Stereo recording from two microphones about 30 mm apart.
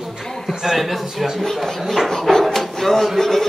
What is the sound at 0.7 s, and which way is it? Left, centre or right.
Speech, centre.